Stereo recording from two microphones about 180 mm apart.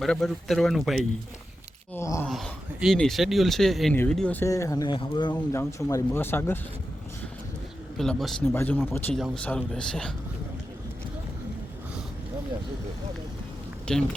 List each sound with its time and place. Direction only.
0.0 s speech: centre (ahead or behind)
1.9 s speech: 15° left (ahead or behind)
2.2 s speech: centre (ahead or behind)
7.9 s speech: centre (ahead or behind)
13.9 s speech: 5° left (ahead or behind)